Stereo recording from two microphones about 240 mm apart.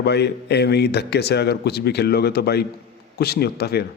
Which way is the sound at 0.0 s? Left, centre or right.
Left.